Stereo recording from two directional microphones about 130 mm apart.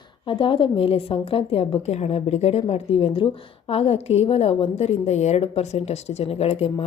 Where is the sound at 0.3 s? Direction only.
40° left (ahead or behind).